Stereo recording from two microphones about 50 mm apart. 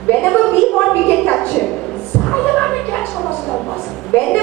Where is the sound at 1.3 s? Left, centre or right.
Left.